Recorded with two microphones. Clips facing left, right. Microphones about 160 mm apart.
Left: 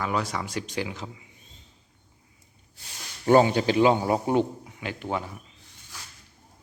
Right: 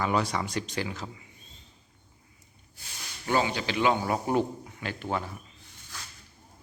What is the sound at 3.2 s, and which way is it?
A man's voice, 45° left (ahead or behind).